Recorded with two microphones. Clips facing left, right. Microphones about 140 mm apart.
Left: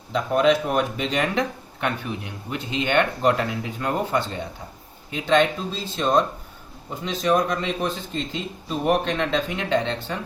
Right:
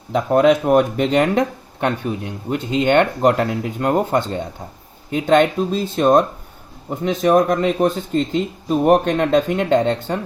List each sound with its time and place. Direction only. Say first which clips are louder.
0.1 s speech: right 5 dB; 50° right (ahead or behind)